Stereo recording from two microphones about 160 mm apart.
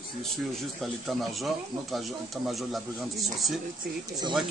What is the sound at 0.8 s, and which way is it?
Speech, centre (ahead or behind).